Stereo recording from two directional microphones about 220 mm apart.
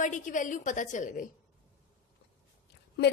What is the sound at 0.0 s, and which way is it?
A woman's voice, 35° left (ahead or behind).